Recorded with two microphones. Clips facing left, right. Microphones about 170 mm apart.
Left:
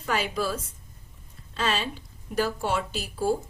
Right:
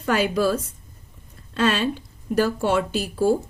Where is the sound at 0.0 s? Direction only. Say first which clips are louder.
Right 7 dB; 70° right (ahead or behind).